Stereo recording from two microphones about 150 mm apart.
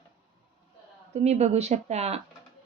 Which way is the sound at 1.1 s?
45° right (ahead or behind).